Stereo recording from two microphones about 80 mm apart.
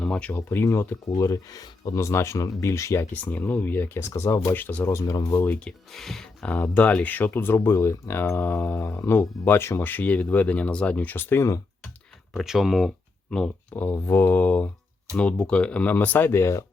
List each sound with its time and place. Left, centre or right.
0.0 s speech: centre
1.2 s speech: left
3.1 s speech: left
4.5 s speech: left
5.1 s speech: left
5.5 s speech: centre
6.5 s speech: centre
8.8 s speech: left
9.0 s speech: left
12.3 s speech: centre
13.7 s speech: left